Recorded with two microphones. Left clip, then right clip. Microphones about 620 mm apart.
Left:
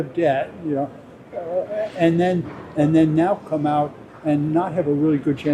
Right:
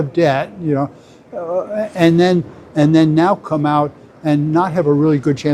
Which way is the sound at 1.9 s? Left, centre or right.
Right.